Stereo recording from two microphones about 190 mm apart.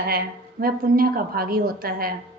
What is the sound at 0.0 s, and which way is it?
A woman's voice, 55° right (ahead or behind).